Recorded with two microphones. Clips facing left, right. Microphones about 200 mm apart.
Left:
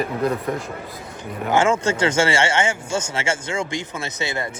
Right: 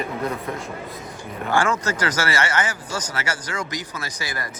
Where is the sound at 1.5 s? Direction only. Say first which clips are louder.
Left 4 dB; 25° left (ahead or behind).